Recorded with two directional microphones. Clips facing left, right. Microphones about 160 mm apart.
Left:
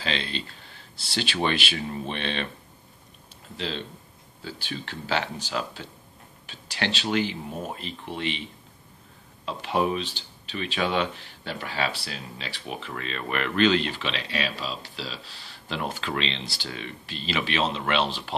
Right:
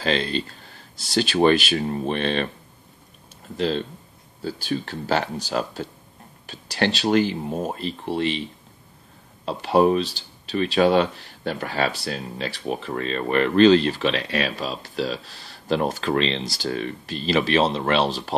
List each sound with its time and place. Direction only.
0.0 s speech: 45° right (ahead or behind)
3.5 s speech: 45° right (ahead or behind)
9.5 s speech: 40° right (ahead or behind)